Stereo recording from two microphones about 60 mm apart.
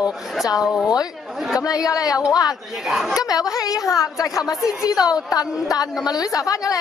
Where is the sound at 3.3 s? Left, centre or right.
Left.